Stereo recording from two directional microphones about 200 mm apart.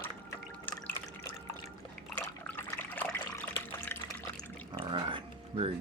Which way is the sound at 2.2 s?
10° left (ahead or behind).